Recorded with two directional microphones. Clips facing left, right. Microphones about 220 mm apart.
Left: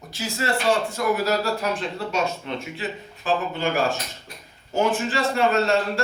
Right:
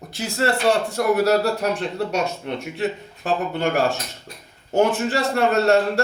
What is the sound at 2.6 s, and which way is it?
A man's voice, 65° right (ahead or behind).